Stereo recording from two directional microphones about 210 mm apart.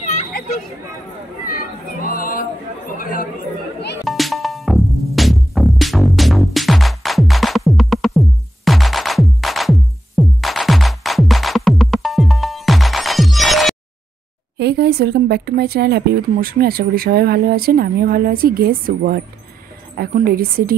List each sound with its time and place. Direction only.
1.4 s chatter: 40° left (ahead or behind)
3.0 s speech: 40° left (ahead or behind)
4.0 s music: centre (ahead or behind)
14.6 s speech: 50° right (ahead or behind)